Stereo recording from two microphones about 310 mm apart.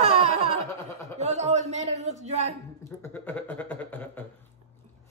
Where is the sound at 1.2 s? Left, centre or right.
Right.